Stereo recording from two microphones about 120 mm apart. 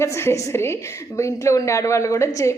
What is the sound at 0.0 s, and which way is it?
A woman's voice, 20° left (ahead or behind).